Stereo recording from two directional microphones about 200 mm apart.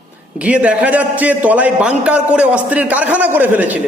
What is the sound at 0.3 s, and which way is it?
A man's voice, 5° right (ahead or behind).